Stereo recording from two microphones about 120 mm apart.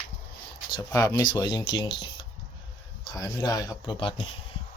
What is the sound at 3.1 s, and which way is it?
Speech, 30° left (ahead or behind).